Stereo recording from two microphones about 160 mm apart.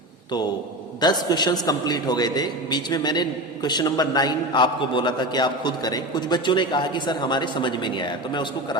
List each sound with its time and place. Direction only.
1.0 s a man's voice: 25° left (ahead or behind)